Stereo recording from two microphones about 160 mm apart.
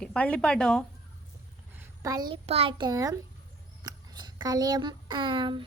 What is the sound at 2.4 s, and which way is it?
Speech, 35° right (ahead or behind).